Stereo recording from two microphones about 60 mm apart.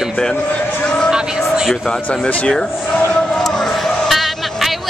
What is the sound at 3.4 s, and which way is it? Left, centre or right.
Music, centre.